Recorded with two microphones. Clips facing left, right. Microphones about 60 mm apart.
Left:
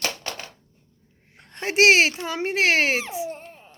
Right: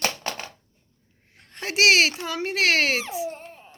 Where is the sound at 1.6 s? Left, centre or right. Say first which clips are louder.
Left 2 dB; left.